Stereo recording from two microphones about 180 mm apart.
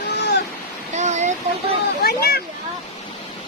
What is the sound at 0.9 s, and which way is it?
Speech, 40° right (ahead or behind).